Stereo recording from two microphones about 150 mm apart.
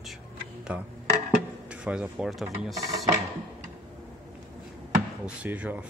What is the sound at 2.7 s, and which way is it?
Speech, 20° right (ahead or behind).